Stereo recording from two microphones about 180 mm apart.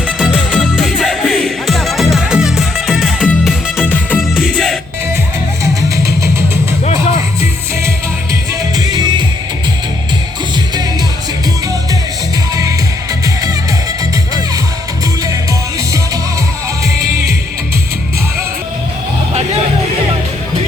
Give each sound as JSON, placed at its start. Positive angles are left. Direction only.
{"t": 0.2, "sound": "music", "side_deg": -5}
{"t": 4.2, "sound": "music", "side_deg": -5}
{"t": 5.6, "sound": "music", "side_deg": -15}
{"t": 8.8, "sound": "music", "side_deg": -25}